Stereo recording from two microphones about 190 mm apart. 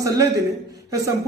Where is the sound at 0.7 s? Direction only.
15° right (ahead or behind).